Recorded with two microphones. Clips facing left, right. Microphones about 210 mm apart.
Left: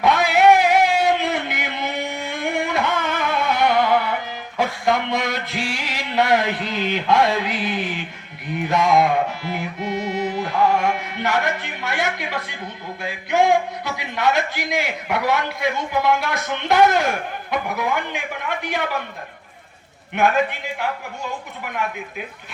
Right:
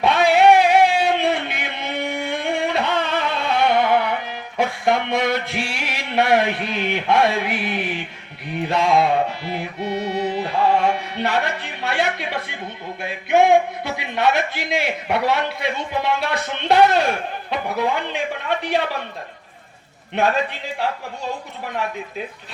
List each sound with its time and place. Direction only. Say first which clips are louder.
0.0 s a sound: right 1 dB; 30° right (ahead or behind)
2.6 s music: left 1 dB; 30° right (ahead or behind)
4.5 s a sound: right 1 dB; 25° right (ahead or behind)
6.7 s a man's voice: even; 25° right (ahead or behind)
8.8 s a man's voice: even; 30° right (ahead or behind)
9.5 s music: even; 30° right (ahead or behind)
10.5 s a man's voice: right 1 dB; 30° right (ahead or behind)
20.1 s a man's voice: left 1 dB; 30° right (ahead or behind)